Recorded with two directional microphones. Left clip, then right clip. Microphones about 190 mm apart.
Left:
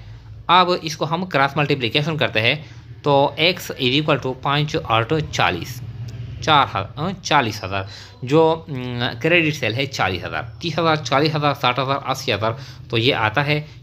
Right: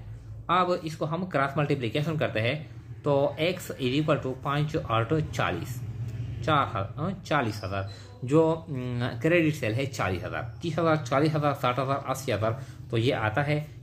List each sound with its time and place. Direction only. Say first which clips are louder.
0.5 s speech: left 10 dB; 40° left (ahead or behind)